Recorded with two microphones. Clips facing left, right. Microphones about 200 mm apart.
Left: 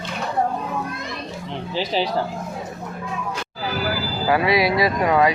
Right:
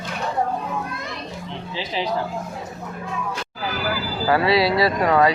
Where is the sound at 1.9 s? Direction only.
35° left (ahead or behind).